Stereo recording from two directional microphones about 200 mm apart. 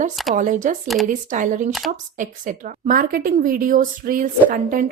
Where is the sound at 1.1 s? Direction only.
40° right (ahead or behind).